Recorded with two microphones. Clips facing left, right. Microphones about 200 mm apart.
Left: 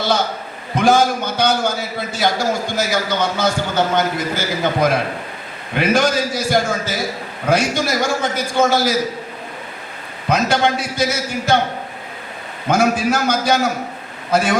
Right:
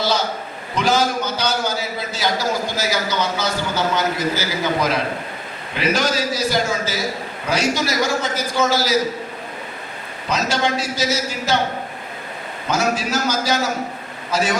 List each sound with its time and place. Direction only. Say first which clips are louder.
0.8 s a man's voice: left 4 dB; 50° left (ahead or behind)
10.2 s a man's voice: left 4 dB; 55° left (ahead or behind)
12.6 s a man's voice: left 5 dB; 55° left (ahead or behind)